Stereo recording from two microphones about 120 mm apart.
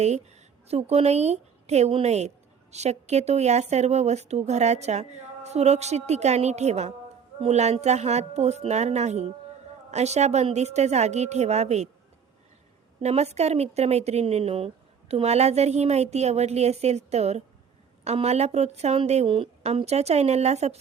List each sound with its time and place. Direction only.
0.7 s speech: 60° right (ahead or behind)
13.0 s speech: 65° right (ahead or behind)
19.3 s speech: 50° right (ahead or behind); by 20.7 s 65° right (ahead or behind)